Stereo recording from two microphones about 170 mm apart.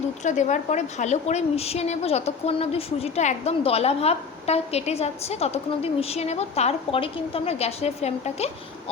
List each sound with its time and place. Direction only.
0.3 s a woman's voice: 45° left (ahead or behind)